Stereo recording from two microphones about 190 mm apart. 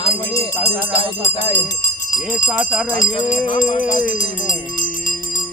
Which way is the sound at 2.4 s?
5° right (ahead or behind).